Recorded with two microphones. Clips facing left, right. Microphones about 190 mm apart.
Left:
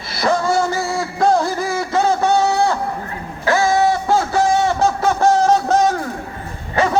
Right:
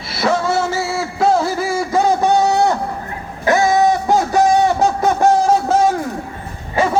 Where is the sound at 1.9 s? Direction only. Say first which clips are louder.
Right 1 dB; 15° right (ahead or behind).